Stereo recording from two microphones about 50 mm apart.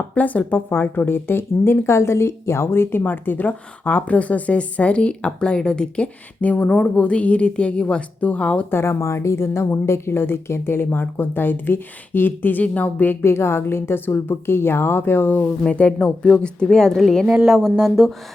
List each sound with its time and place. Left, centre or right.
0.1 s speech: left
0.9 s a woman's voice: left
2.6 s a woman's voice: left
3.0 s a woman's voice: left; by 6.1 s centre
6.4 s speech: left
6.7 s a woman's voice: left
8.7 s a woman's voice: left
13.2 s a woman's voice: left
15.4 s a woman's voice: left
17.2 s speech: centre